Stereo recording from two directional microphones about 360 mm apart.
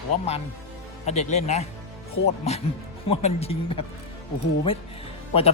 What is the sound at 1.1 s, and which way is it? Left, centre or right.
Speech, centre.